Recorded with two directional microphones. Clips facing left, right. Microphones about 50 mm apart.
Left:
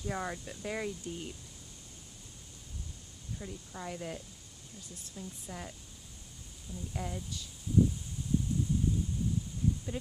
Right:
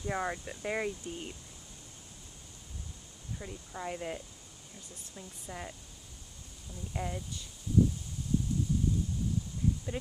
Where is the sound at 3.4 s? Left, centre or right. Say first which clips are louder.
Right 2 dB; centre.